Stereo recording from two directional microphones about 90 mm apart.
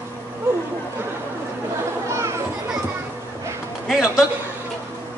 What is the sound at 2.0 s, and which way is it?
Children playing, 30° right (ahead or behind).